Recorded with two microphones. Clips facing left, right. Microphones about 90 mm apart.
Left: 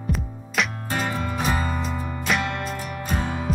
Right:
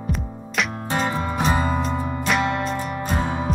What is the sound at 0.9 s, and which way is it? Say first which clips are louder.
Music: right 4 dB; 30° right (ahead or behind).